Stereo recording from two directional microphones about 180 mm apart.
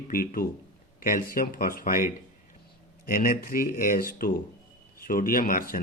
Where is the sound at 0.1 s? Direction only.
50° left (ahead or behind).